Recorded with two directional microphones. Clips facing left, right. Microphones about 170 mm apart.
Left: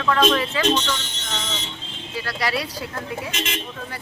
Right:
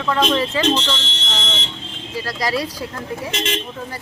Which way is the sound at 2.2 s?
40° right (ahead or behind).